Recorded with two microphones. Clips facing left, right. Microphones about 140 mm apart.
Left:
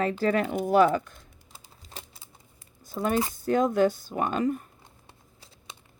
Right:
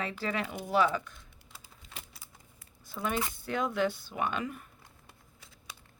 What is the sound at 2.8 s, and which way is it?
Speech, 40° left (ahead or behind).